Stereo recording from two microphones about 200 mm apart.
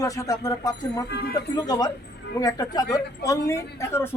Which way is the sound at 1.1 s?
55° left (ahead or behind).